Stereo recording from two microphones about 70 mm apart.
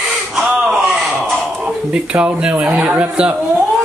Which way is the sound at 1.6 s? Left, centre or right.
Centre.